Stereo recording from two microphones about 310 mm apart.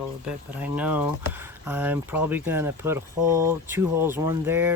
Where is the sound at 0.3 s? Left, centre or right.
Centre.